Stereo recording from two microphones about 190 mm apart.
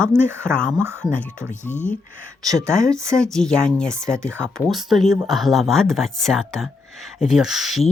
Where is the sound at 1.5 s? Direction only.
40° left (ahead or behind).